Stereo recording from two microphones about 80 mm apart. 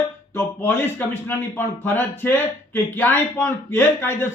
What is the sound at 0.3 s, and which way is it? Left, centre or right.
A man's voice, left.